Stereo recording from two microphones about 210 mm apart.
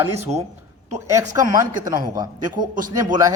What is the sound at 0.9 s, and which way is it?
Speech, 15° right (ahead or behind).